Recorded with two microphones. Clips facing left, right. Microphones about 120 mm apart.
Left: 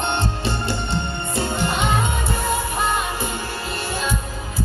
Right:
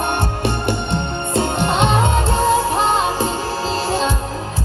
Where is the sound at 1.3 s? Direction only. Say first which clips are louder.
Right 5 dB; 70° right (ahead or behind); by 4.1 s 90° right.